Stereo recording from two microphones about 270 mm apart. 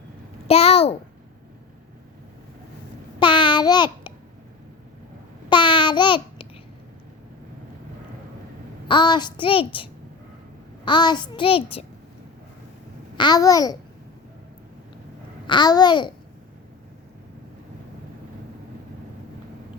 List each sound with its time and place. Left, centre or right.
0.4 s a child's voice: left
3.2 s child singing: centre
5.5 s babbling: centre
8.9 s a child's voice: centre
13.1 s a child's voice: centre
15.4 s a child's voice: centre